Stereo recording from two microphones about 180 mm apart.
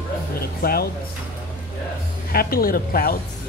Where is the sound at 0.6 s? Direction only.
55° left (ahead or behind).